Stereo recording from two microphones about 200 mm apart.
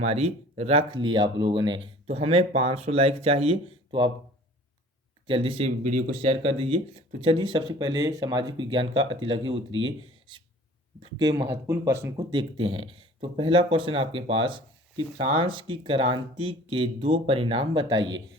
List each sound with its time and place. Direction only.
0.0 s speech: 30° right (ahead or behind)
5.2 s speech: 25° right (ahead or behind)
12.1 s speech: 25° right (ahead or behind)